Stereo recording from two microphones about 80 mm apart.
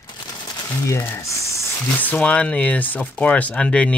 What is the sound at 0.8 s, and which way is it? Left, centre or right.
Speech, left.